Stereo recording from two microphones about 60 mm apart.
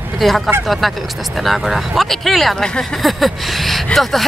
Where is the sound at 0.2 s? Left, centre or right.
Centre.